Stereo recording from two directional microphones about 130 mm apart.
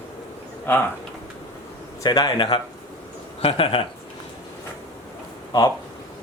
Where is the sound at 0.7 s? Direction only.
15° left (ahead or behind).